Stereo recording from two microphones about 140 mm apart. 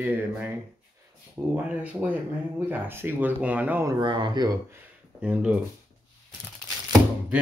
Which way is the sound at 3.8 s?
35° right (ahead or behind).